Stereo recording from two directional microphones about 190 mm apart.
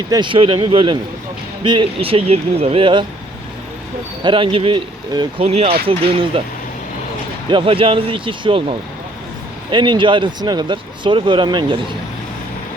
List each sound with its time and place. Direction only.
0.1 s speech: 25° right (ahead or behind)
4.2 s speech: 25° right (ahead or behind)
7.5 s speech: 30° right (ahead or behind)
9.7 s speech: 25° right (ahead or behind)